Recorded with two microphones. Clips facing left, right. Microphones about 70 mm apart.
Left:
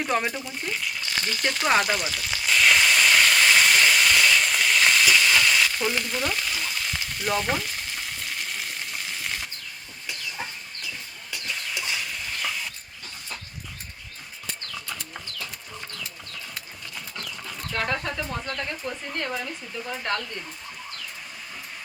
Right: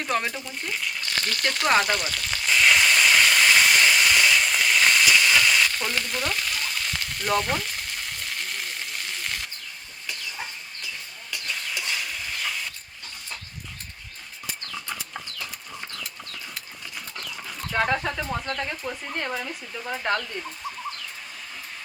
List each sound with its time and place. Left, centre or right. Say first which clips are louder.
0.0 s frying: left 1 dB; centre
11.3 s stir: right 1 dB; centre
17.7 s a sound: right 4 dB; centre
18.2 s speech: right 2 dB; centre